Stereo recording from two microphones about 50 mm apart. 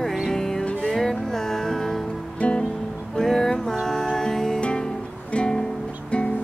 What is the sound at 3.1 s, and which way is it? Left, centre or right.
Music, centre.